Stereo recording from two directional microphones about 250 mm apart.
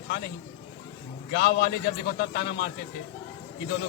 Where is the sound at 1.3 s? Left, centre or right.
Left.